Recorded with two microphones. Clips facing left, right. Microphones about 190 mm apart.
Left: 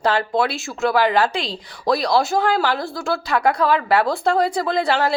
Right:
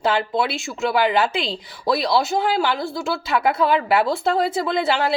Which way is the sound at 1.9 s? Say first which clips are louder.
Left 1 dB; centre (ahead or behind).